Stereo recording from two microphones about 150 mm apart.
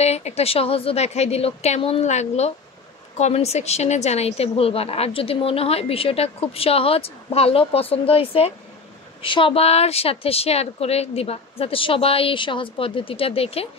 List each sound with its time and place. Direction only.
0.0 s a woman's voice: 45° left (ahead or behind)